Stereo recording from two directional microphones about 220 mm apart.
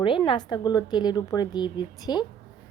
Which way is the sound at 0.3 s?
20° left (ahead or behind).